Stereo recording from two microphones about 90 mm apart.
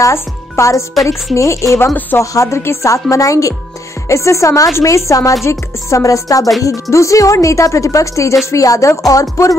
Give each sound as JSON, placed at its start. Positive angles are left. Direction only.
{"t": 0.0, "sound": "speech", "side_deg": 35}
{"t": 2.0, "sound": "speech", "side_deg": 20}
{"t": 2.3, "sound": "speech", "side_deg": 35}